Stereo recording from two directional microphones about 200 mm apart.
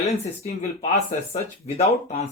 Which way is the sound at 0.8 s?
30° left (ahead or behind).